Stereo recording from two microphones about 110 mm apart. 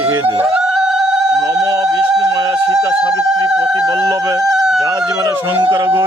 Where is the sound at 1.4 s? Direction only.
35° right (ahead or behind).